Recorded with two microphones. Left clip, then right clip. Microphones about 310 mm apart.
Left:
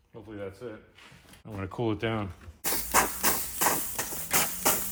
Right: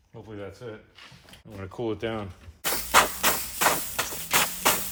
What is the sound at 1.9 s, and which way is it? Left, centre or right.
Speech, left.